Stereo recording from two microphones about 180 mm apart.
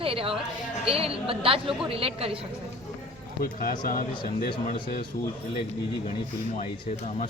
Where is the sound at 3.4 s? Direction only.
55° left (ahead or behind).